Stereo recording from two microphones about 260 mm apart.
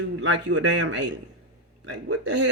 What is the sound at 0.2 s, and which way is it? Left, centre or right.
A man's voice, right.